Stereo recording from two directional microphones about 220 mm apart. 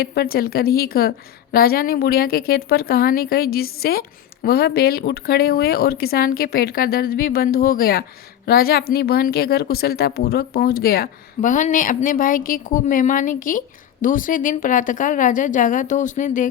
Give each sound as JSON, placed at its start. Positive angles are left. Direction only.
{"t": 0.0, "sound": "speech", "side_deg": 45}